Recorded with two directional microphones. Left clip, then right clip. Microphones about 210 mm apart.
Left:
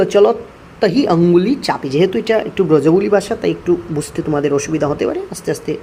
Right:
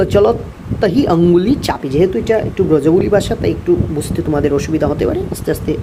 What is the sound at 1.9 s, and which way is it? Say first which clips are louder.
Speech: right 1 dB; 5° left (ahead or behind).